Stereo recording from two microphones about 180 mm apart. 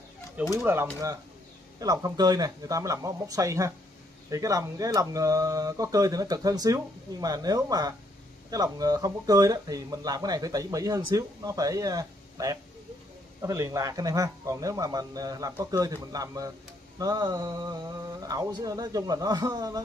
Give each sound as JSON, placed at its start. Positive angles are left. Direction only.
{"t": 0.6, "sound": "speech", "side_deg": -10}